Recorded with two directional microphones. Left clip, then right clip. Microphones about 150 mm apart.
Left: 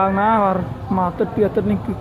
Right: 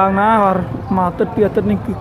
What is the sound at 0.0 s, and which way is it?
Speech, 5° right (ahead or behind).